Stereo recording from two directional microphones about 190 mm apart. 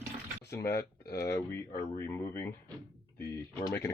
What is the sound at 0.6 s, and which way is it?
Speech, 55° left (ahead or behind).